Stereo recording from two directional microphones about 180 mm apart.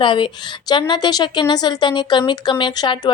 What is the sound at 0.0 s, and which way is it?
A woman's voice, 30° left (ahead or behind).